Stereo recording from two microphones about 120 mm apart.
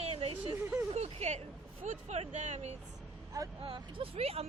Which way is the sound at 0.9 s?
65° right (ahead or behind).